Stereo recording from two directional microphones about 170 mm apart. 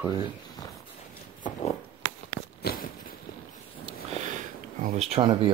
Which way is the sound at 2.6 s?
60° left (ahead or behind).